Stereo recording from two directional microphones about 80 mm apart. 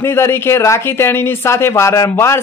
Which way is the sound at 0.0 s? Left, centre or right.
Left.